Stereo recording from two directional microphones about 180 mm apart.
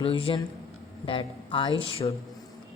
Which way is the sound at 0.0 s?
30° left (ahead or behind).